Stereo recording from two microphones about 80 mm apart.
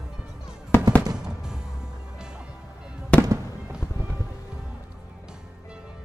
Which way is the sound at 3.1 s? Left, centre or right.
Centre.